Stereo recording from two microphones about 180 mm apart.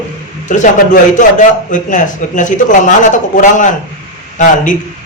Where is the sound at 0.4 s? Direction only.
45° left (ahead or behind).